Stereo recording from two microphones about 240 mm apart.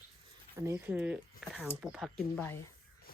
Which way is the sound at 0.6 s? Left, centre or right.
Centre.